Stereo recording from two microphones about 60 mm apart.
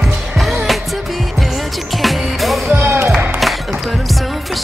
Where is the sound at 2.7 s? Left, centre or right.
Right.